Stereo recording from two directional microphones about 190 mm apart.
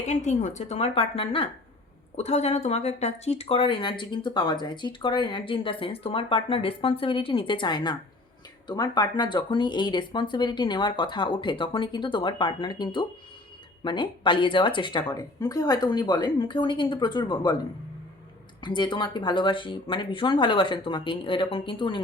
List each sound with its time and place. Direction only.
0.0 s a woman's voice: 40° left (ahead or behind); by 17.6 s 20° left (ahead or behind)
18.6 s speech: 25° left (ahead or behind)